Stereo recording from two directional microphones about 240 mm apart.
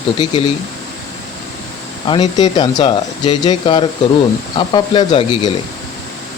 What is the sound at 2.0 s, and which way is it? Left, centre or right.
Speech, centre.